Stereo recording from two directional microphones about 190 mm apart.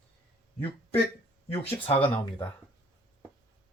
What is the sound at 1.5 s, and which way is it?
Speech, 30° left (ahead or behind).